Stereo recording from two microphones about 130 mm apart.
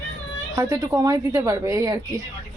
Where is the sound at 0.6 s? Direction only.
25° right (ahead or behind).